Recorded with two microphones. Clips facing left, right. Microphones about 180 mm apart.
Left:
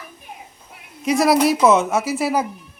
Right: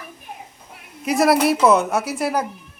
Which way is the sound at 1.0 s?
Centre (ahead or behind).